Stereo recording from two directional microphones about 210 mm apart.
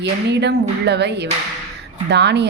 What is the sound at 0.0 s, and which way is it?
Speech, 55° right (ahead or behind).